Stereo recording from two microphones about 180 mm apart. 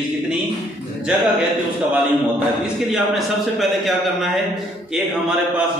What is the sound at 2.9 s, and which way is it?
Speech, centre (ahead or behind).